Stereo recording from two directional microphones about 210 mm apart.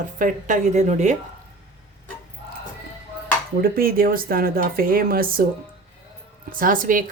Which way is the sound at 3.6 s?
45° right (ahead or behind).